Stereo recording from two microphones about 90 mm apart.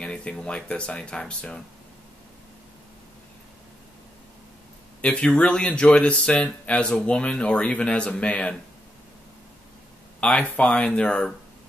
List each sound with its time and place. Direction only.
0.0 s speech: 10° left (ahead or behind)
5.0 s speech: 15° left (ahead or behind)
10.5 s speech: 15° left (ahead or behind)